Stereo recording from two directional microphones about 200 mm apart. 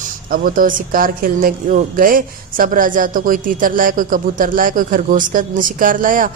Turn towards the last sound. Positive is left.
turn(degrees=-45)  # may be behind; listen again after turning